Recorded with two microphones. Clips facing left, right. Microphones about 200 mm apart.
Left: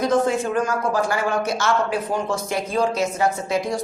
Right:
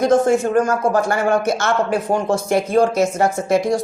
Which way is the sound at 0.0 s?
45° right (ahead or behind).